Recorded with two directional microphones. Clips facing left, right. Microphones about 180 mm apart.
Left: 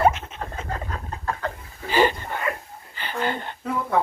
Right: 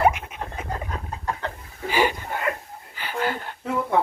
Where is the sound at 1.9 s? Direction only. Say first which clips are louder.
Left 2 dB; 10° right (ahead or behind).